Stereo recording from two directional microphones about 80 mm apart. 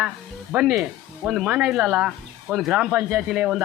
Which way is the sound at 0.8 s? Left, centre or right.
Centre.